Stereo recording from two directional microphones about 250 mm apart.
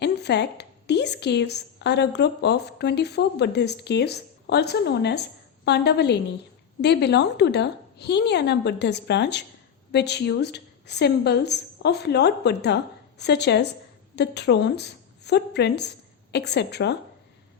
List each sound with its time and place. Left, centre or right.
0.0 s a woman's voice: left